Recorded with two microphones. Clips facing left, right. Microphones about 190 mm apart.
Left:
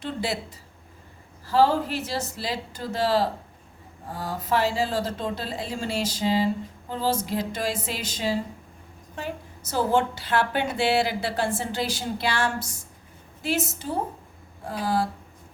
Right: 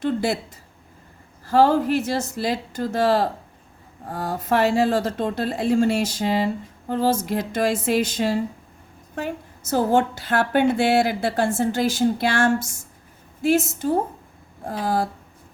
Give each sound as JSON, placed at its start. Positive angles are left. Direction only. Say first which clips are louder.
{"t": 0.0, "sound": "a woman's voice", "louder": "right 7 dB", "side_deg": -50}
{"t": 1.5, "sound": "a woman's voice", "louder": "right 4 dB", "side_deg": -50}